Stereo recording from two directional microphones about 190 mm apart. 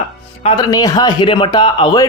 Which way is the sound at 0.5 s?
20° left (ahead or behind).